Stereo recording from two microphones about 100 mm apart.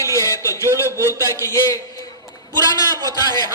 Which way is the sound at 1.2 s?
30° left (ahead or behind).